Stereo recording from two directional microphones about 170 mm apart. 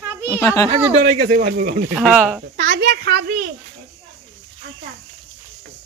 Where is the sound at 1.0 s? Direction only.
55° right (ahead or behind).